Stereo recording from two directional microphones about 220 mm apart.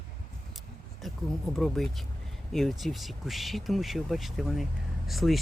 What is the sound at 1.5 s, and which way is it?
Speech, centre (ahead or behind).